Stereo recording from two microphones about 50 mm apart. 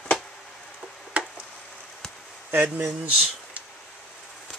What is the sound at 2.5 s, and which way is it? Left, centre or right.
Speech, right.